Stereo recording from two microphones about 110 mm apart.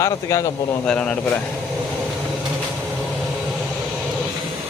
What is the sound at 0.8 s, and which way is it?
Speech, 10° left (ahead or behind).